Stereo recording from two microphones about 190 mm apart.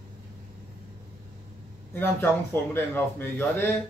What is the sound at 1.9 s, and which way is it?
A man's voice, 10° left (ahead or behind).